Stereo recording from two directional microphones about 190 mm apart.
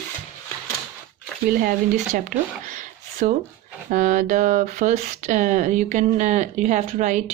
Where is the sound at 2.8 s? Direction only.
40° right (ahead or behind).